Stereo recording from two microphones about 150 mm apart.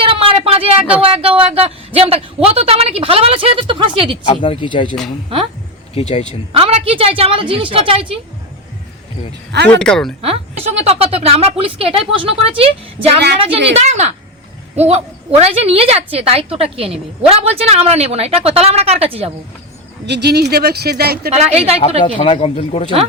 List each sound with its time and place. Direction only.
0.0 s a sound: 35° right (ahead or behind)
0.8 s speech: 5° right (ahead or behind)
1.0 s a woman's voice: 40° right (ahead or behind)
4.3 s speech: 35° left (ahead or behind)
5.9 s speech: 40° left (ahead or behind)
6.5 s a woman's voice: 40° right (ahead or behind)
9.6 s speech: 5° left (ahead or behind)
10.2 s a woman's voice: 40° right (ahead or behind)
20.2 s speech: 90° right
21.3 s a woman's voice: 45° right (ahead or behind)
22.0 s speech: 45° left (ahead or behind)